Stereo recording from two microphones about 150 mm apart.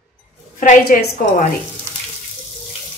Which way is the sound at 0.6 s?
60° left (ahead or behind).